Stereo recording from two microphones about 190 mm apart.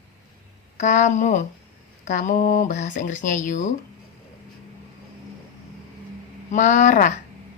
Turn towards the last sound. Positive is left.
turn(degrees=40)  # may be behind; listen again after turning